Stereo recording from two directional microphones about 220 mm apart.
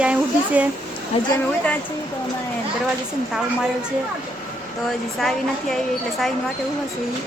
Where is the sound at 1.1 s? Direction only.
25° left (ahead or behind).